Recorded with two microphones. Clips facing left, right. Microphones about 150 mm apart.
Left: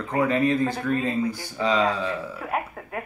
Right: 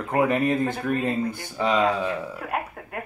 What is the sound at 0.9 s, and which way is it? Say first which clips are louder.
Speech: even; 60° right (ahead or behind).